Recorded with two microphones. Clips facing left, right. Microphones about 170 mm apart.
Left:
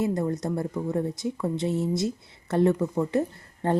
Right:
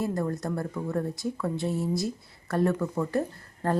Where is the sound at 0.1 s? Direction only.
20° left (ahead or behind).